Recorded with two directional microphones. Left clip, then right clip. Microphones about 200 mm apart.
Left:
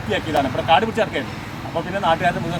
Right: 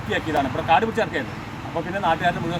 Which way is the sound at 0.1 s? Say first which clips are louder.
Left 2 dB; centre (ahead or behind).